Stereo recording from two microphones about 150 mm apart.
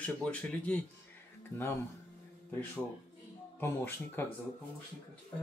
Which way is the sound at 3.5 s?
15° left (ahead or behind).